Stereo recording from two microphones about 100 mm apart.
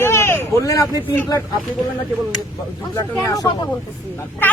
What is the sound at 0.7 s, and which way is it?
Speech, 35° left (ahead or behind).